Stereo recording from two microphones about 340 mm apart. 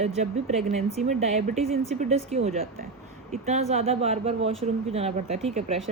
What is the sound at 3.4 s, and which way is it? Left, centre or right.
Speech, centre.